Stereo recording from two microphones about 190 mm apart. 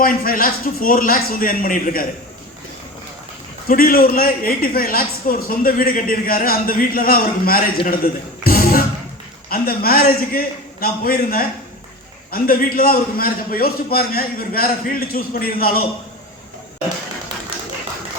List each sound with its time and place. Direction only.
0.0 s a woman's voice: 50° left (ahead or behind)
3.7 s a woman's voice: 50° left (ahead or behind)
7.9 s a sound: 50° left (ahead or behind)
9.5 s a woman's voice: 50° left (ahead or behind)